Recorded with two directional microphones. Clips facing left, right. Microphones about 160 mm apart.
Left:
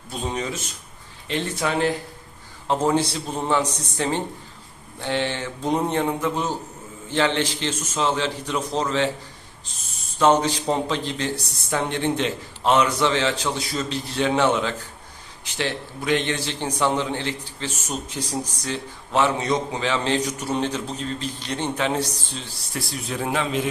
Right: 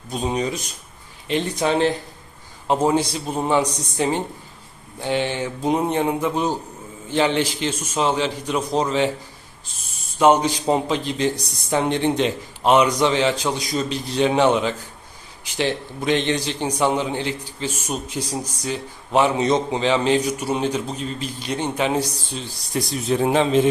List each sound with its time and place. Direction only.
0.1 s a man's voice: 15° right (ahead or behind)
2.6 s a man's voice: 10° right (ahead or behind)
10.2 s a man's voice: 10° right (ahead or behind); by 23.6 s 30° right (ahead or behind)